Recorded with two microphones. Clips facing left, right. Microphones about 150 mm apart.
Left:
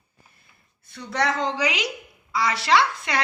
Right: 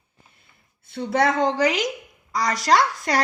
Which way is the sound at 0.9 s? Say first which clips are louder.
Right 5 dB; 55° right (ahead or behind).